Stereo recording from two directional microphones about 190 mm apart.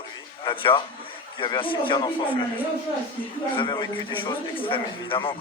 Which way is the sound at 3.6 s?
25° left (ahead or behind).